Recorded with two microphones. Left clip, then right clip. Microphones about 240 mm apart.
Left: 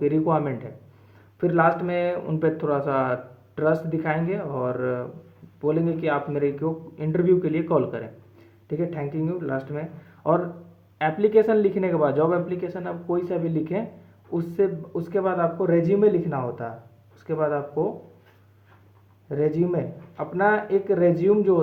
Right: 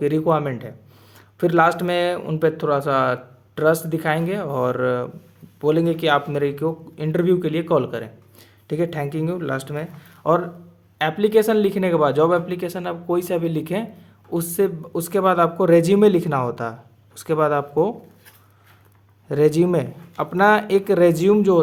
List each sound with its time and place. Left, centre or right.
0.0 s speech: right
10.9 s speech: right
19.3 s speech: right